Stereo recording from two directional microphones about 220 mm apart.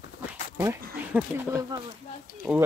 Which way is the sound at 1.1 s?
10° right (ahead or behind).